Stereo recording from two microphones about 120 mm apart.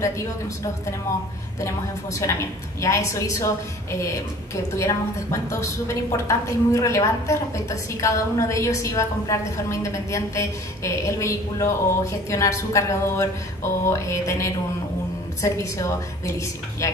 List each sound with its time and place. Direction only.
2.8 s a woman's voice: 25° left (ahead or behind)